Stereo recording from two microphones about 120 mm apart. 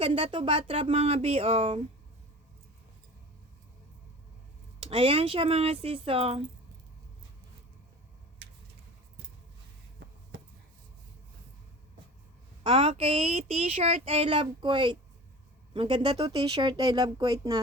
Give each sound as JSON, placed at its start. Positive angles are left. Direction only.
{"t": 0.0, "sound": "speech", "side_deg": -50}
{"t": 4.8, "sound": "speech", "side_deg": -50}
{"t": 12.6, "sound": "speech", "side_deg": -50}